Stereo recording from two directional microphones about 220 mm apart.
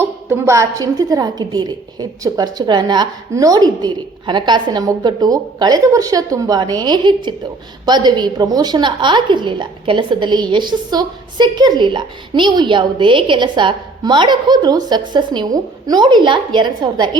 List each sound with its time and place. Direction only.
0.0 s a woman's voice: 10° right (ahead or behind)